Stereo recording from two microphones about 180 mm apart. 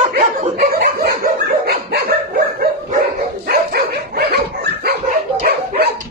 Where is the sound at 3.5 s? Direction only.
60° right (ahead or behind).